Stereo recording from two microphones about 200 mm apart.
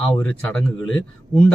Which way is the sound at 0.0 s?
5° left (ahead or behind).